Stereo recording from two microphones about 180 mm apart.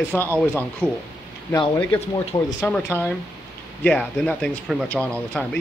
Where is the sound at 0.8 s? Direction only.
10° right (ahead or behind).